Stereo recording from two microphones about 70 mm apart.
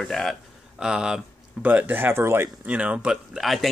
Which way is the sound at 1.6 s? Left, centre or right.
Right.